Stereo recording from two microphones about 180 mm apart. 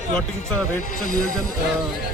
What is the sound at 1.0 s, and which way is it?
Speech, 50° left (ahead or behind).